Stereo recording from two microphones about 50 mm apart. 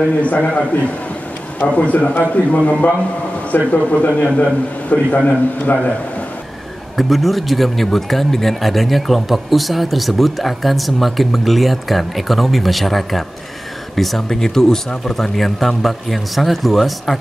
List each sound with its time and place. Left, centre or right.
0.1 s a man's voice: left
7.0 s speech: centre